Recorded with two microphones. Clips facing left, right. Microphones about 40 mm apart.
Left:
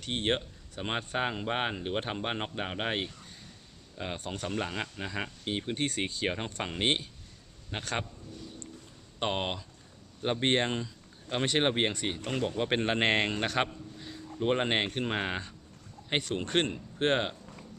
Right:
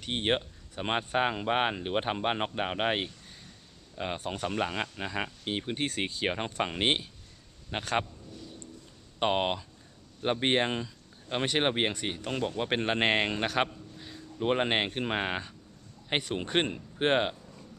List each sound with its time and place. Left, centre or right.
0.0 s speech: centre